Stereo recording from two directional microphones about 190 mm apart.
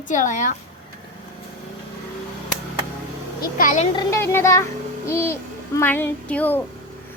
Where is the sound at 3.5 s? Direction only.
45° left (ahead or behind).